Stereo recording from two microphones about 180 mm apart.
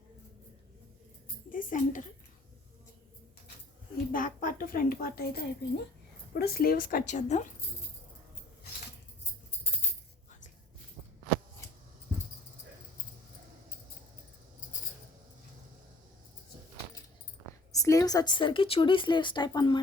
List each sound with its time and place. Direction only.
1.5 s a woman's voice: 45° left (ahead or behind)
4.1 s a woman's voice: 50° left (ahead or behind)
17.8 s speech: 20° left (ahead or behind)